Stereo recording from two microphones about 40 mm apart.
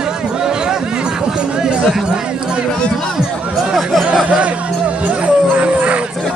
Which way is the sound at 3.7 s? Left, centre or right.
Centre.